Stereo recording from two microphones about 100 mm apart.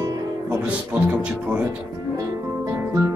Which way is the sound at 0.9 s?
15° right (ahead or behind).